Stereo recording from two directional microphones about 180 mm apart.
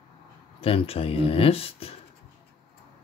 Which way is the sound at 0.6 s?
30° left (ahead or behind).